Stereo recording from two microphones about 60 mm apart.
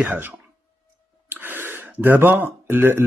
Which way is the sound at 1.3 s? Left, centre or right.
Right.